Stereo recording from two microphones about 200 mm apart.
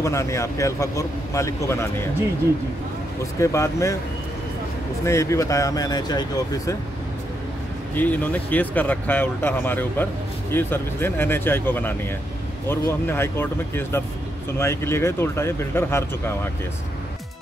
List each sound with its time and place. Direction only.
0.0 s speech: 15° left (ahead or behind)
3.3 s speech: 15° left (ahead or behind)
5.0 s speech: 15° left (ahead or behind)
7.9 s speech: 10° left (ahead or behind)